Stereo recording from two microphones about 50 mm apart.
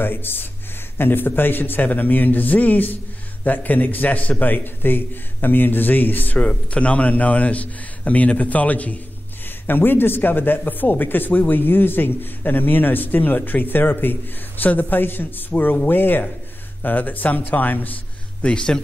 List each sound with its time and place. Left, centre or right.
0.0 s speech: left
6.5 s a man's voice: left
9.7 s speech: left
18.4 s a man's voice: centre